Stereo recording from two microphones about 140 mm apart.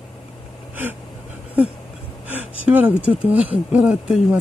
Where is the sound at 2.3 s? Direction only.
10° right (ahead or behind).